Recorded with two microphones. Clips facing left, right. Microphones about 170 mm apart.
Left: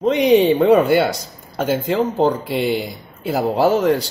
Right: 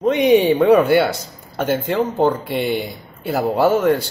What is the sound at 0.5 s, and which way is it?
Speech, centre (ahead or behind).